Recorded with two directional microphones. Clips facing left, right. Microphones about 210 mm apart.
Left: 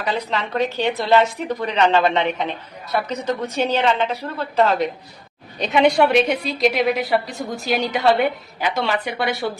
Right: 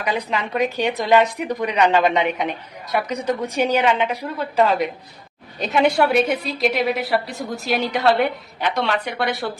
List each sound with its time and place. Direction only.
0.0 s a woman's voice: 10° right (ahead or behind)